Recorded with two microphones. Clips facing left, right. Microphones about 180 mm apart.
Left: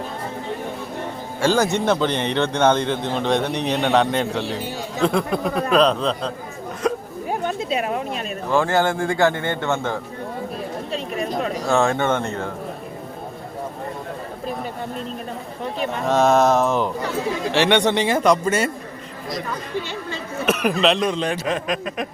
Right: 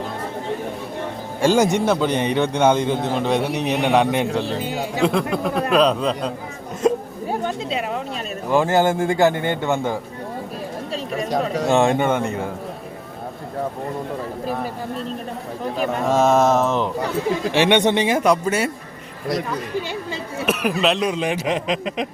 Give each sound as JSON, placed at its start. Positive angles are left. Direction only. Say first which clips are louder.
{"t": 1.4, "sound": "a man's voice", "louder": "right 2 dB", "side_deg": -15}
{"t": 6.8, "sound": "hiccup", "louder": "right 4 dB", "side_deg": -25}
{"t": 8.4, "sound": "a man's voice", "louder": "right 2 dB", "side_deg": -15}
{"t": 11.7, "sound": "a man's voice", "louder": "right 2 dB", "side_deg": -20}
{"t": 16.0, "sound": "speech", "louder": "even", "side_deg": -5}
{"t": 17.5, "sound": "a man's voice", "louder": "right 1 dB", "side_deg": -15}
{"t": 20.4, "sound": "a sound", "louder": "left 1 dB", "side_deg": -5}
{"t": 20.8, "sound": "a man's voice", "louder": "even", "side_deg": -5}